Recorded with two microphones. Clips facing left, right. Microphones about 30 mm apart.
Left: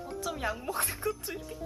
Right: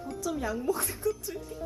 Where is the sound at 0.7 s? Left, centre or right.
Left.